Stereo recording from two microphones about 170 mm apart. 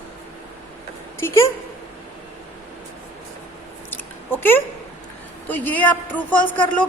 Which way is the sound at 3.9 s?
10° left (ahead or behind).